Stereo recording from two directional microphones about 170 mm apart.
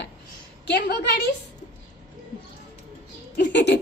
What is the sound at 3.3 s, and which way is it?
Speech, 85° left.